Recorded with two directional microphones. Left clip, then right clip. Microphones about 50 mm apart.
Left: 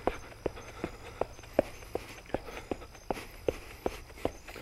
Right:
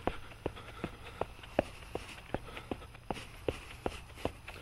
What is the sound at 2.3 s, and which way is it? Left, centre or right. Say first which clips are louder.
Walk: left 4 dB; left.